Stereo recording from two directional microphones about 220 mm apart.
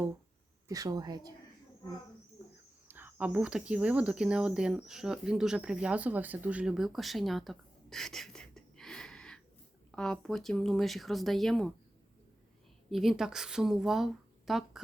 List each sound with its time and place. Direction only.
0.7 s a woman's voice: 15° right (ahead or behind)
2.4 s a sound: 15° right (ahead or behind)
2.8 s speech: 10° right (ahead or behind)
12.9 s speech: centre (ahead or behind)